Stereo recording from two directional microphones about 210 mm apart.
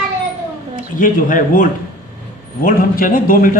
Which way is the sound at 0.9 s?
40° left (ahead or behind).